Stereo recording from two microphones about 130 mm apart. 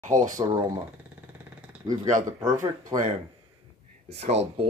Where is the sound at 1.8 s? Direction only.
30° right (ahead or behind).